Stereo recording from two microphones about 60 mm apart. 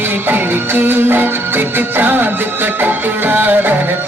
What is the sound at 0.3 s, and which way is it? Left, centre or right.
Music, right.